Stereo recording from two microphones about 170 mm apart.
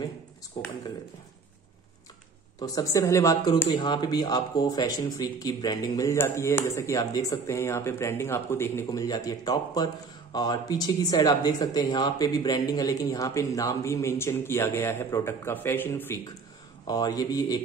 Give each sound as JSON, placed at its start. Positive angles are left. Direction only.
{"t": 0.6, "sound": "speech", "side_deg": 25}
{"t": 2.6, "sound": "speech", "side_deg": 20}
{"t": 16.8, "sound": "speech", "side_deg": 25}